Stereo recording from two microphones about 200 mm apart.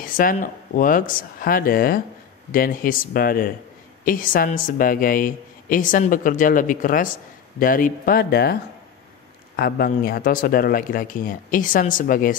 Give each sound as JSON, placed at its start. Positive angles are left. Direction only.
{"t": 0.0, "sound": "speech", "side_deg": 45}
{"t": 9.6, "sound": "speech", "side_deg": 50}